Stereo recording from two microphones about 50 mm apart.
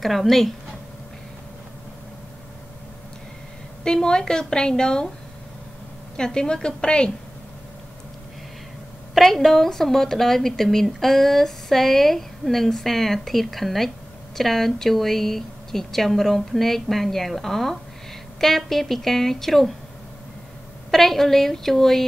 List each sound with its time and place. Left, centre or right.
0.0 s speech: centre
3.8 s a woman's voice: centre
6.1 s a woman's voice: centre
9.1 s speech: centre
20.9 s speech: centre